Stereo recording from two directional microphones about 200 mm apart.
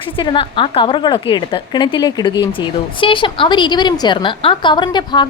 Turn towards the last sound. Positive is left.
turn(degrees=20)  # may be behind; listen again after turning